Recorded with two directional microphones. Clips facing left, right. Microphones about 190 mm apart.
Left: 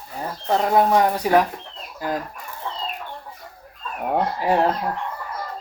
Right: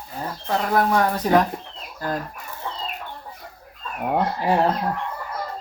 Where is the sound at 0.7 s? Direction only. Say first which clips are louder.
Left 2 dB; 20° left (ahead or behind).